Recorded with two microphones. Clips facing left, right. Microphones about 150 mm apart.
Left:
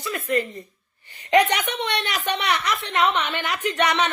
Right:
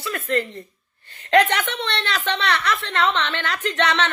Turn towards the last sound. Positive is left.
turn(degrees=15)  # may be behind; listen again after turning